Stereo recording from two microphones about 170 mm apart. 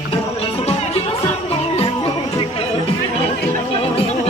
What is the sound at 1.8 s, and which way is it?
Music, 35° left (ahead or behind).